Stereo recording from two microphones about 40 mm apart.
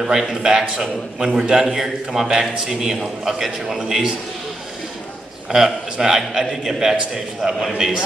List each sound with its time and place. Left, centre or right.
0.0 s a man's voice: centre
5.5 s a man's voice: centre
7.7 s a man's voice: centre